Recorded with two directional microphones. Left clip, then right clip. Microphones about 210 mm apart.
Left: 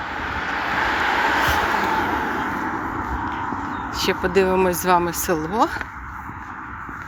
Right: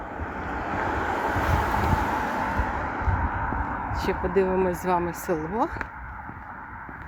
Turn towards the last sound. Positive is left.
turn(degrees=-50)  # may be behind; listen again after turning